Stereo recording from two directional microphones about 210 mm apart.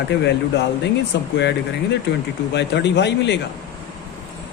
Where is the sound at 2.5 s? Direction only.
55° left (ahead or behind).